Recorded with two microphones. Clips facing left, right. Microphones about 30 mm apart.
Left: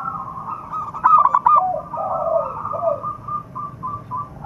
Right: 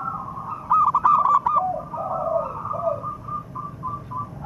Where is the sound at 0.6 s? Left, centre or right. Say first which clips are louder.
Right 15 dB; right.